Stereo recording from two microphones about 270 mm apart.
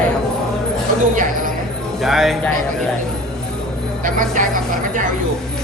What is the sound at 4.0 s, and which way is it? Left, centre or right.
A woman's voice, right.